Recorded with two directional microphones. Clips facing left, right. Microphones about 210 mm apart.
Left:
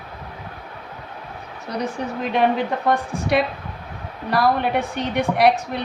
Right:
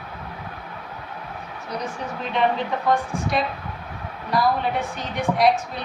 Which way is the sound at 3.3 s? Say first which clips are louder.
Left 8 dB; 70° left (ahead or behind).